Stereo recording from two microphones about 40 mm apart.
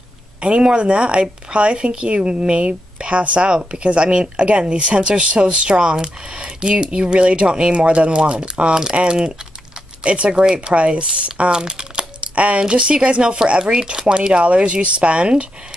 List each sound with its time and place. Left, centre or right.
0.4 s a woman's voice: right